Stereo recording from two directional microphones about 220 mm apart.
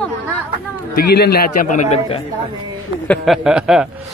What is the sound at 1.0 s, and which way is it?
A man's voice, 45° left (ahead or behind).